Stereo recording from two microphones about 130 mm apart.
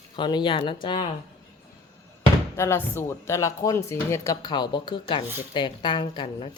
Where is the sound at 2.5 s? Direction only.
20° left (ahead or behind).